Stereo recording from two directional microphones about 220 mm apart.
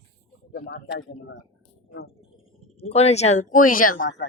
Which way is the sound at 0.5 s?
50° left (ahead or behind).